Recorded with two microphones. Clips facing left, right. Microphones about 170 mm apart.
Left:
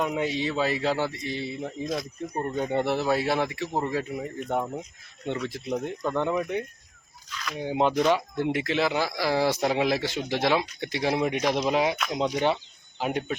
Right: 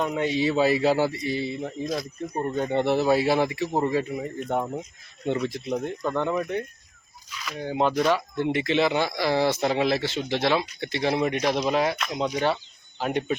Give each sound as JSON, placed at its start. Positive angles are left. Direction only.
{"t": 0.0, "sound": "a man's voice", "side_deg": 5}
{"t": 7.3, "sound": "a sound", "side_deg": -5}
{"t": 7.6, "sound": "speech", "side_deg": 15}